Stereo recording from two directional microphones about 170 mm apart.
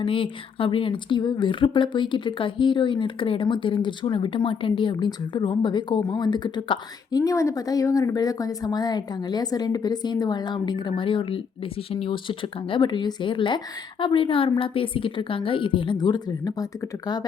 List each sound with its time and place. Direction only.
0.0 s a woman's voice: 30° left (ahead or behind)